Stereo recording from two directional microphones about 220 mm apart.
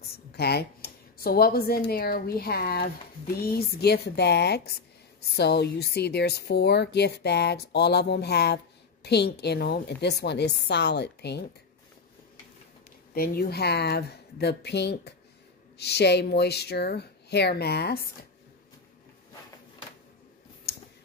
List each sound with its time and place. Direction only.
0.3 s speech: 45° left (ahead or behind)
13.1 s speech: 45° left (ahead or behind)
20.7 s a sound: 45° left (ahead or behind)